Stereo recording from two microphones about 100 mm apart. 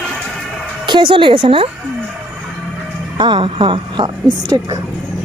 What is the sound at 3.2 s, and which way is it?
A woman's voice, 50° right (ahead or behind).